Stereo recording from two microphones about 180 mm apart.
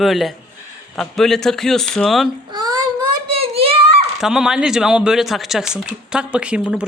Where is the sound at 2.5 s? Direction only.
20° right (ahead or behind).